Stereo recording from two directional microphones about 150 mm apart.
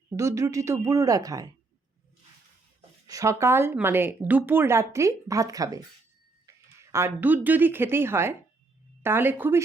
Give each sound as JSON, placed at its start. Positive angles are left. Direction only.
{"t": 0.1, "sound": "a woman's voice", "side_deg": -20}
{"t": 3.1, "sound": "speech", "side_deg": -20}